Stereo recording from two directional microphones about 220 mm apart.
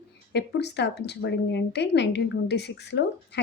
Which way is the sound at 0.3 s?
50° left (ahead or behind).